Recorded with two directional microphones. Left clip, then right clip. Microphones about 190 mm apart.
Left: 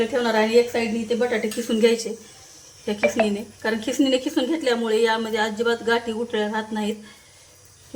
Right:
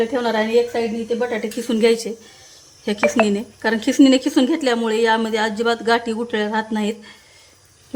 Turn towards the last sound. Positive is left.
turn(degrees=-45)  # may be behind; listen again after turning